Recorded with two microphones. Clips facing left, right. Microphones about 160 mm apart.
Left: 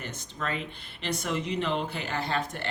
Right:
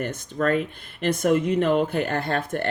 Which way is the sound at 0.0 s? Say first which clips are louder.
Right 11 dB; 55° right (ahead or behind).